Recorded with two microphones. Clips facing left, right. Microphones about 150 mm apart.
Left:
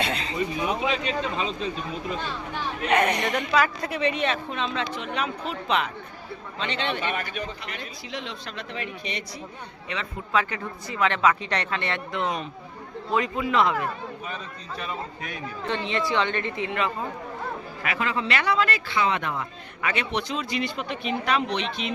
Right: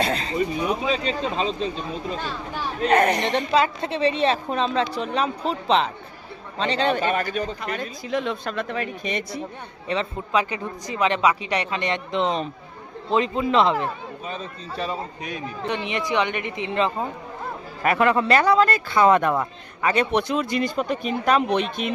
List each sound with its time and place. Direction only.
0.0 s a sound: 40° right (ahead or behind)
0.9 s a woman's voice: 30° right (ahead or behind)
2.8 s a woman's voice: 40° right (ahead or behind)
9.9 s a woman's voice: 35° right (ahead or behind)
10.3 s a woman's voice: 15° right (ahead or behind)
17.8 s a man's voice: 55° right (ahead or behind)
18.3 s speech: 40° right (ahead or behind)
19.8 s speech: 40° right (ahead or behind)